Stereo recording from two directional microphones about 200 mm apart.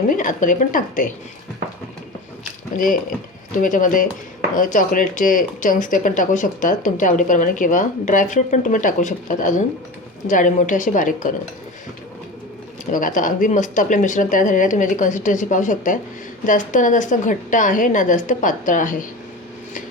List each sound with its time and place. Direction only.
0.1 s speech: 40° left (ahead or behind)
2.7 s speech: 40° left (ahead or behind)
12.8 s speech: 40° left (ahead or behind)